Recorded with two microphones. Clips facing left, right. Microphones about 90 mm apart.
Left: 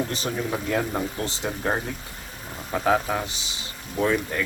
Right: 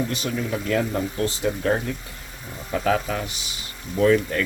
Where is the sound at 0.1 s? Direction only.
35° left (ahead or behind).